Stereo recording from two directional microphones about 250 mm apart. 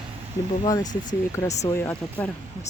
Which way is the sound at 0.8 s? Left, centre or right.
Left.